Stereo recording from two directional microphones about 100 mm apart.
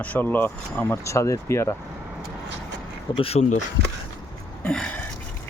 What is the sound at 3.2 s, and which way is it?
Speech, 80° left.